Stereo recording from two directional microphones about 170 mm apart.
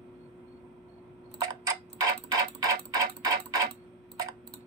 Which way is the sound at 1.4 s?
20° right (ahead or behind).